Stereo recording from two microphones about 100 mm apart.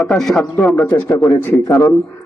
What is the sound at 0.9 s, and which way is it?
Speech, 25° left (ahead or behind).